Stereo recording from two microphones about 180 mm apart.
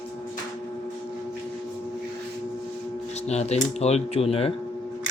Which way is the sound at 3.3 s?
35° left (ahead or behind).